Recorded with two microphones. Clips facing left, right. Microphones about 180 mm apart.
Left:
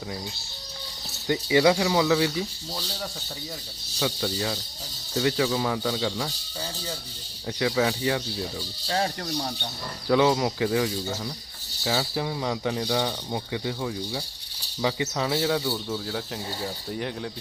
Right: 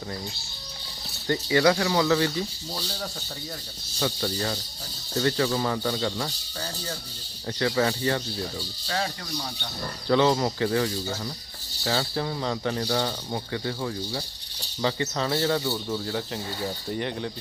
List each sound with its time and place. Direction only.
1.3 s speech: 15° left (ahead or behind)
4.0 s speech: 5° left (ahead or behind)
7.4 s speech: 5° left (ahead or behind)
8.9 s speech: 40° left (ahead or behind)
10.1 s speech: 5° left (ahead or behind)